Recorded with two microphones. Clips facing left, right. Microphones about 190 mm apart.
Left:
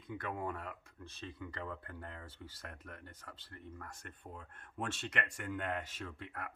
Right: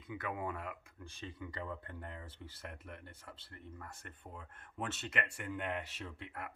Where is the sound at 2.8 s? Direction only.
15° right (ahead or behind).